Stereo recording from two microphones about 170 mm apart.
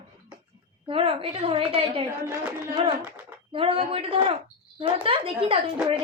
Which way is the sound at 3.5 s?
35° right (ahead or behind).